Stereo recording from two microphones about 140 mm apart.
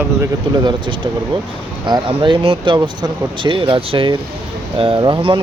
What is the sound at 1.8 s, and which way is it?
Speech, 35° right (ahead or behind).